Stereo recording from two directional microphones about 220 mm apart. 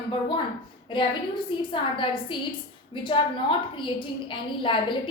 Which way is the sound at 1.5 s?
20° left (ahead or behind).